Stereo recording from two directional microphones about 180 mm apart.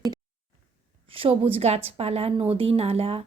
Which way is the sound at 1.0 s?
30° right (ahead or behind).